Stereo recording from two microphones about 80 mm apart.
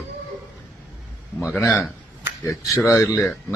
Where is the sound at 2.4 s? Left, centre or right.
Left.